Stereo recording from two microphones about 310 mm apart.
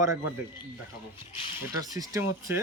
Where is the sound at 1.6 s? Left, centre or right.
Centre.